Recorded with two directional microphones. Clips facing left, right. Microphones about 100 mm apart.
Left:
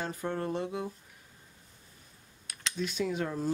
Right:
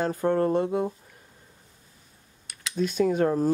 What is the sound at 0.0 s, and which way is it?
Speech, 50° right (ahead or behind).